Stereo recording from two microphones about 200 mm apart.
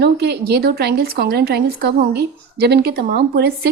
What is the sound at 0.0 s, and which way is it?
A woman's voice, 55° right (ahead or behind).